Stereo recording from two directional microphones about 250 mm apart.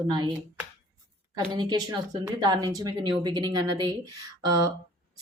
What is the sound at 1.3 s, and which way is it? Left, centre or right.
Speech, centre.